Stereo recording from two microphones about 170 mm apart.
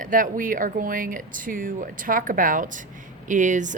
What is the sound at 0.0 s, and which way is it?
Speech, 50° right (ahead or behind).